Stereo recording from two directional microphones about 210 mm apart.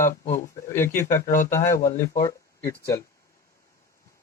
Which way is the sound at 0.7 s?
10° left (ahead or behind).